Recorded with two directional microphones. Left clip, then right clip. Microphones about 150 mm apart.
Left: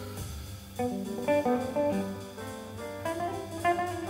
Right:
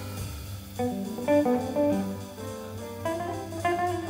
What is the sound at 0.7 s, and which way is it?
Music, 15° left (ahead or behind).